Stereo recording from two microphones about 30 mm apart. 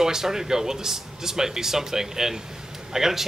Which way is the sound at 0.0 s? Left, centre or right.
Centre.